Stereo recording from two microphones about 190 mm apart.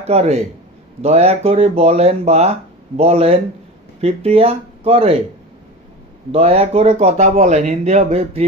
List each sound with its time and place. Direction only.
0.0 s speech: 35° right (ahead or behind)
6.3 s speech: 30° right (ahead or behind)